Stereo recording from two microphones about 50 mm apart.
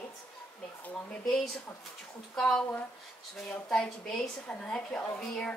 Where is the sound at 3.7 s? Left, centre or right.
Centre.